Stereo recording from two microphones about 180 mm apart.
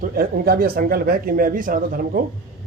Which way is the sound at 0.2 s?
55° right (ahead or behind).